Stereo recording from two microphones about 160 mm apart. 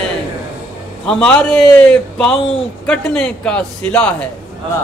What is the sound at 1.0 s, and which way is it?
A man's voice, 5° left (ahead or behind).